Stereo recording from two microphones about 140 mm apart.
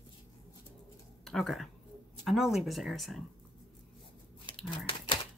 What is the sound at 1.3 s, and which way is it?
Speech, centre (ahead or behind).